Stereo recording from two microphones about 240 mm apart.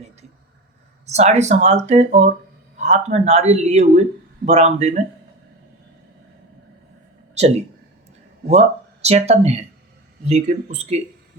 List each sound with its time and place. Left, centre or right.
1.0 s speech: right
7.3 s speech: right